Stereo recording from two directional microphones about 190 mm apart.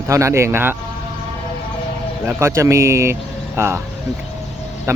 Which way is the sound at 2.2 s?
15° right (ahead or behind).